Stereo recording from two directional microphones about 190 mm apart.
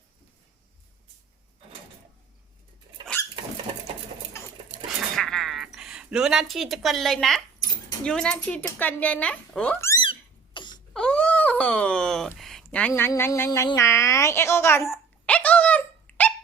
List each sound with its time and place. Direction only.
5.1 s music: centre (ahead or behind)
8.0 s a woman's voice: 5° left (ahead or behind)
10.0 s cough: 25° left (ahead or behind)
10.9 s cat: 5° left (ahead or behind)
12.9 s speech: 15° left (ahead or behind)
14.8 s dog: 5° left (ahead or behind)